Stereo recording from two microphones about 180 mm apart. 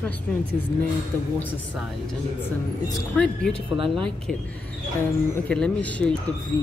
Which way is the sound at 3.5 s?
30° right (ahead or behind).